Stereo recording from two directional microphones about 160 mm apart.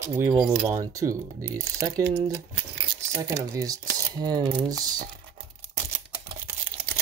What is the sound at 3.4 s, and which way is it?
Speech, 20° right (ahead or behind).